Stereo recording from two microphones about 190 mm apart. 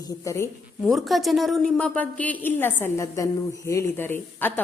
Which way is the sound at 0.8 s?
Centre (ahead or behind).